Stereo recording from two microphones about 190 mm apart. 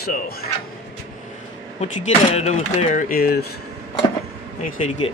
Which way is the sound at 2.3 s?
35° left (ahead or behind).